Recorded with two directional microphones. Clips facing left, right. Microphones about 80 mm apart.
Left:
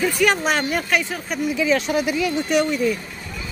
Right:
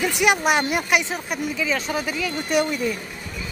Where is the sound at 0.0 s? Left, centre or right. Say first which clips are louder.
Left 1 dB; centre.